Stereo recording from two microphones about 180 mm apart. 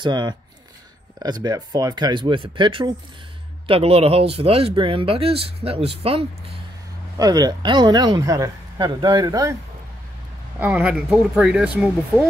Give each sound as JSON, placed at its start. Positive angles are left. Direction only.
{"t": 0.0, "sound": "speech", "side_deg": -25}
{"t": 7.2, "sound": "speech", "side_deg": -20}
{"t": 10.6, "sound": "speech", "side_deg": -10}